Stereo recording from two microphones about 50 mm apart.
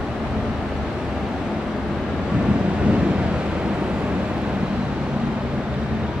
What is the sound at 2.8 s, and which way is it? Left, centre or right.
Vehicle, right.